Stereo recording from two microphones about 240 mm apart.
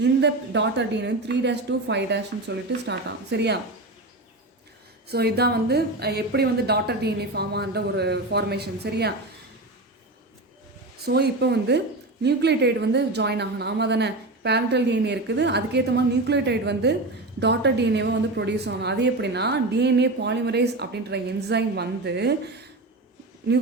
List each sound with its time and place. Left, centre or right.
0.0 s a woman's voice: right
5.0 s a woman's voice: right
11.0 s a woman's voice: right